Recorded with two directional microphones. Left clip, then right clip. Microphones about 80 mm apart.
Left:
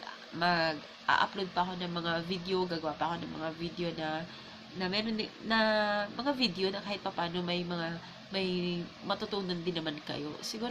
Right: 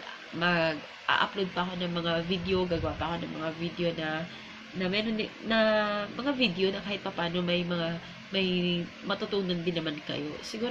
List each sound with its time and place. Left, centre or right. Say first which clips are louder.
0.4 s speech: right 2 dB; left